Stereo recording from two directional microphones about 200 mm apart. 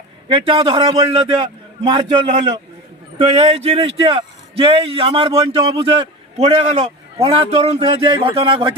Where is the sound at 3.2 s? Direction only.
30° right (ahead or behind).